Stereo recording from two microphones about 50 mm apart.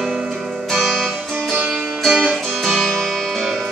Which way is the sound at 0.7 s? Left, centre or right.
Centre.